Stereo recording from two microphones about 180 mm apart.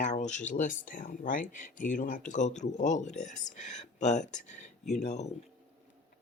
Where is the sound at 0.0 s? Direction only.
40° left (ahead or behind).